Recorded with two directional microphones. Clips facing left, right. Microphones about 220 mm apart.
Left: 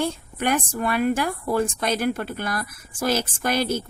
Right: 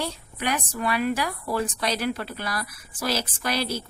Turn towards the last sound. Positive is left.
turn(degrees=50)  # may be behind; listen again after turning